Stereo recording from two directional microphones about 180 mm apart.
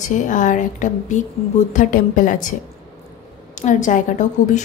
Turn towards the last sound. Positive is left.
turn(degrees=45)  # may be behind; listen again after turning